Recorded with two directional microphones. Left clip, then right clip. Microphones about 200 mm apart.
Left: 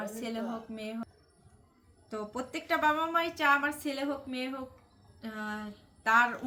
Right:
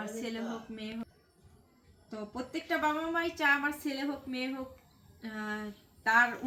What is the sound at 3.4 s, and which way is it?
Speech, 35° left (ahead or behind).